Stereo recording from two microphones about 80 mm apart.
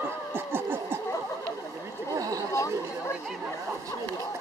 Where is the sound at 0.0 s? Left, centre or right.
Right.